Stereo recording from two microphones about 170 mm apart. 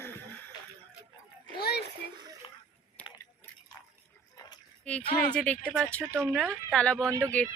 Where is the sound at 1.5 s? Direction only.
70° left (ahead or behind).